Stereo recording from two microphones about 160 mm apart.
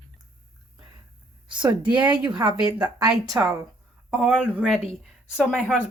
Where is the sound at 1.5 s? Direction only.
30° right (ahead or behind).